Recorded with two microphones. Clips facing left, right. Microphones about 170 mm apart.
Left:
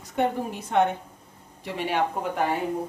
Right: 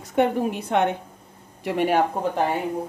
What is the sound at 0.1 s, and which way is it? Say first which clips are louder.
Speech: right 5 dB; 70° right (ahead or behind).